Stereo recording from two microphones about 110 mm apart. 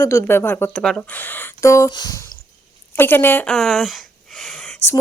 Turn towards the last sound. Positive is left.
turn(degrees=0)  # may be behind; listen again after turning